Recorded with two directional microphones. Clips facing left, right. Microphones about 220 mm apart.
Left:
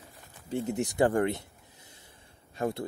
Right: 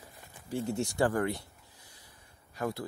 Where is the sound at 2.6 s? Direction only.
25° left (ahead or behind).